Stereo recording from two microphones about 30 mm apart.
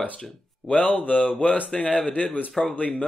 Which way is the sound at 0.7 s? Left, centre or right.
Left.